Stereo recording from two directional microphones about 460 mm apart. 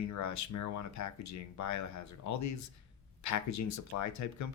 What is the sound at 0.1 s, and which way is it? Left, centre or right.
Speech, left.